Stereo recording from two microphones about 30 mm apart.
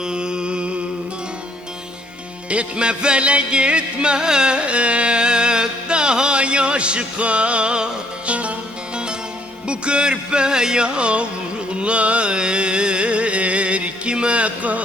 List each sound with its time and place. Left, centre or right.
0.0 s music: right
2.5 s music: right
4.6 s music: right
8.3 s music: right
9.6 s music: right
10.8 s music: right
14.1 s music: right
14.3 s music: right